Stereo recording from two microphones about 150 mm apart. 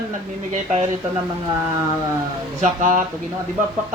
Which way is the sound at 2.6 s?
55° right (ahead or behind).